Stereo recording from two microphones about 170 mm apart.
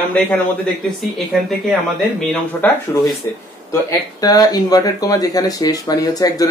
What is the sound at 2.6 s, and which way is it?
Speech, 10° left (ahead or behind).